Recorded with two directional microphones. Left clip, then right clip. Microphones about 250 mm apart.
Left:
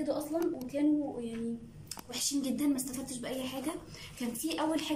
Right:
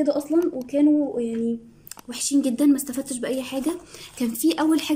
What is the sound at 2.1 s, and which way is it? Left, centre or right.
A woman's voice, right.